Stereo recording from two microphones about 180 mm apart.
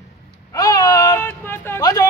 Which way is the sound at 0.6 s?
20° left (ahead or behind).